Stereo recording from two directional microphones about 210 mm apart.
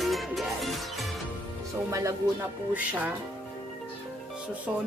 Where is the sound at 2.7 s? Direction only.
10° right (ahead or behind).